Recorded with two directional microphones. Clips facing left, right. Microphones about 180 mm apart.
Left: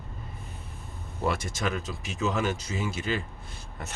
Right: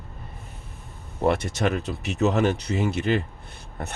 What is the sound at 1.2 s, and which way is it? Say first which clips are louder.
Speech: right 7 dB; 60° right (ahead or behind).